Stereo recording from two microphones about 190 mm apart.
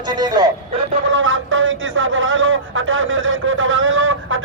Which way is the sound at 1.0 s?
90° right.